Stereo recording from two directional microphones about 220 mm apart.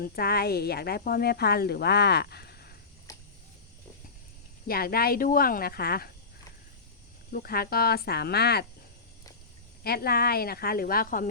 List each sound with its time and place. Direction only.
0.0 s speech: 45° left (ahead or behind)
3.1 s a sound: 15° left (ahead or behind)
4.6 s speech: 45° left (ahead or behind)
7.3 s speech: 45° left (ahead or behind)
9.8 s speech: 45° left (ahead or behind)